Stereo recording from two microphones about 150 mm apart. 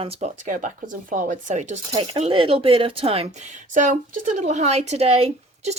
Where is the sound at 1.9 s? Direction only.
40° right (ahead or behind).